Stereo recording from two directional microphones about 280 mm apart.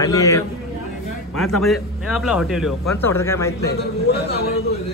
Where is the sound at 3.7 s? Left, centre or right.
Left.